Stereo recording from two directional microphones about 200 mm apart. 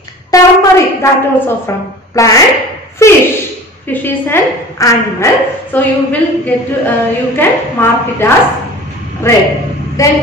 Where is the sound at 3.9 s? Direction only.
10° left (ahead or behind).